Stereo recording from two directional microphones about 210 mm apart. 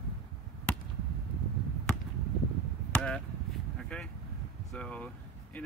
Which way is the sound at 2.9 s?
5° left (ahead or behind).